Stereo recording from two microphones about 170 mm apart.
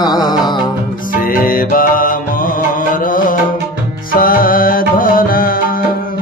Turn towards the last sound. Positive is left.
turn(degrees=60)  # may be behind; listen again after turning